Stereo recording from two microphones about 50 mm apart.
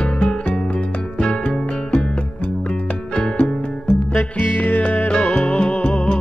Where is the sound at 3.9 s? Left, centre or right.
Left.